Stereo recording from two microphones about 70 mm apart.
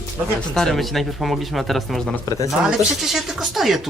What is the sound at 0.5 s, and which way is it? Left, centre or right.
Speech, centre.